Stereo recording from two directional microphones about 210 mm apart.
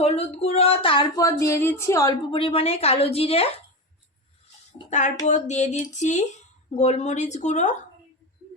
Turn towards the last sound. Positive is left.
turn(degrees=35)  # may be behind; listen again after turning